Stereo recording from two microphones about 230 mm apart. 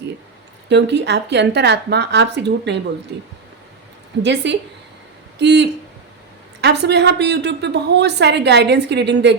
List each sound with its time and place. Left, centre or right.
0.7 s a woman's voice: right
4.2 s a woman's voice: right